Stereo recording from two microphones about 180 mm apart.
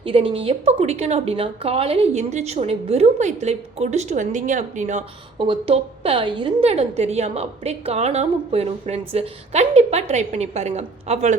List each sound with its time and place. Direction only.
0.0 s a woman's voice: 30° right (ahead or behind)
5.5 s a woman's voice: 30° right (ahead or behind)